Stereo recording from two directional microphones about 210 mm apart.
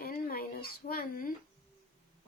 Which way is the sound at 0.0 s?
45° left (ahead or behind).